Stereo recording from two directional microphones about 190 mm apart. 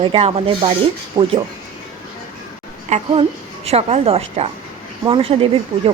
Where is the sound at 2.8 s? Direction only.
35° right (ahead or behind).